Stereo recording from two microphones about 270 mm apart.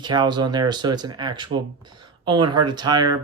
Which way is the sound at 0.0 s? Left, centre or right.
Centre.